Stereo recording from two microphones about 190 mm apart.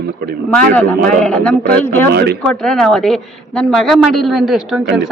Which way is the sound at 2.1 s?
60° right (ahead or behind).